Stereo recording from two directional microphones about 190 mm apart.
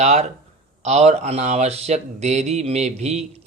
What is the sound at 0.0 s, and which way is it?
Speech, 35° right (ahead or behind).